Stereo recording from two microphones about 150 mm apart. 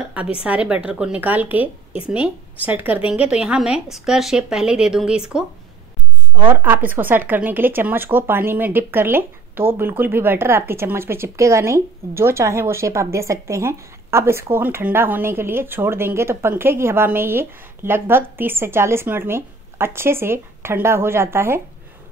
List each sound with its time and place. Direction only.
0.4 s a woman's voice: 10° right (ahead or behind)
6.5 s speech: 15° right (ahead or behind)